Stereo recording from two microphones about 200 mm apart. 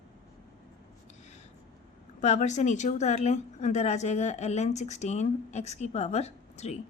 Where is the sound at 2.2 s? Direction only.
35° left (ahead or behind).